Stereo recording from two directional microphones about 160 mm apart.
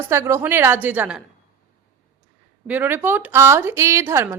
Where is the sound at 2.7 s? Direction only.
10° right (ahead or behind).